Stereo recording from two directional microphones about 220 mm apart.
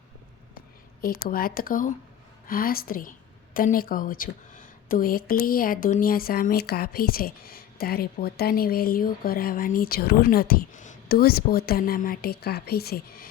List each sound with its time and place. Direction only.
1.0 s a woman's voice: 40° left (ahead or behind)